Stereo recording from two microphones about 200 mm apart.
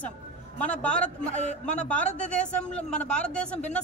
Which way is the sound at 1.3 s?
35° left (ahead or behind).